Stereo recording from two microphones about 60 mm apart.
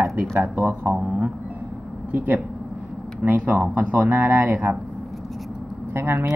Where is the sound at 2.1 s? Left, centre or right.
Right.